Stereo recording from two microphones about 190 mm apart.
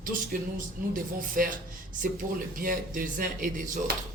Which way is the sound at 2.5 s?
50° right (ahead or behind).